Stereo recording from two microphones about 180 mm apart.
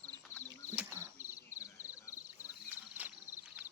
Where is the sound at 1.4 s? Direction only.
15° left (ahead or behind).